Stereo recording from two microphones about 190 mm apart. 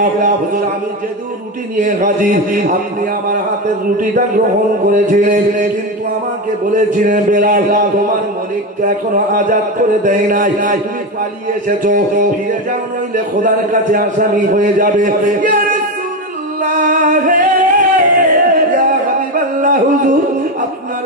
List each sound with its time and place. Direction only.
0.0 s a man's voice: 45° right (ahead or behind)
1.8 s a man's voice: 45° right (ahead or behind)
6.7 s a man's voice: 45° right (ahead or behind)
8.8 s a man's voice: 45° right (ahead or behind)
16.6 s singing: 40° right (ahead or behind)
19.3 s a sound: 45° right (ahead or behind)